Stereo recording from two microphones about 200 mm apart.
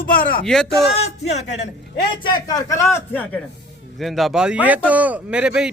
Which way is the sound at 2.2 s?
20° left (ahead or behind).